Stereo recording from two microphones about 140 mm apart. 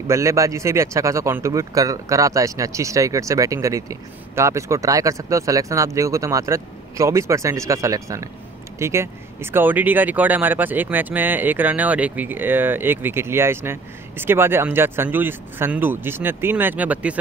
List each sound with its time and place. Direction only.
0.1 s speech: 20° right (ahead or behind)